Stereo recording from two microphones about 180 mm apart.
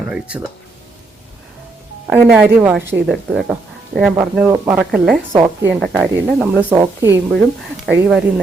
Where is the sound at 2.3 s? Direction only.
10° right (ahead or behind).